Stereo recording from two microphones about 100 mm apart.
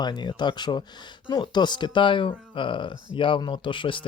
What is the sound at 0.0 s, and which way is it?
Speech, 45° left (ahead or behind).